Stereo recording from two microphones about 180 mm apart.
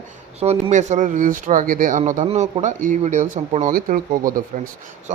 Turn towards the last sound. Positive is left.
turn(degrees=-50)  # may be behind; listen again after turning